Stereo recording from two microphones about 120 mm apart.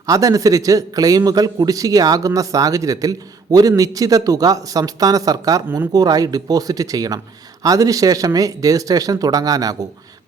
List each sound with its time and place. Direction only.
0.0 s a man's voice: 30° right (ahead or behind)